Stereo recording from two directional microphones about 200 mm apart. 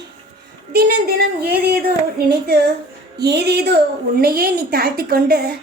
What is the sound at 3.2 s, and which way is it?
A woman's voice, 55° right (ahead or behind).